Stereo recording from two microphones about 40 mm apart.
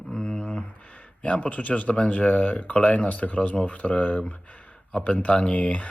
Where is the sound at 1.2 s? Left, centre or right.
Left.